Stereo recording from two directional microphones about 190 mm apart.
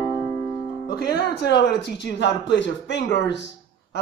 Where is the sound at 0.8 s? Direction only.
60° left (ahead or behind).